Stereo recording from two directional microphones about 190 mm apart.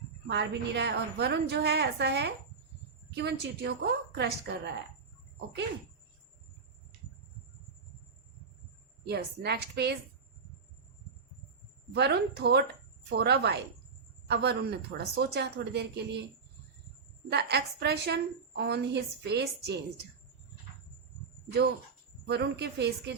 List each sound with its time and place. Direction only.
0.3 s a woman's voice: 65° right (ahead or behind)
9.0 s a woman's voice: 60° right (ahead or behind)
11.9 s a woman's voice: 60° right (ahead or behind)
17.2 s a woman's voice: 60° right (ahead or behind)
22.3 s a woman's voice: 60° right (ahead or behind)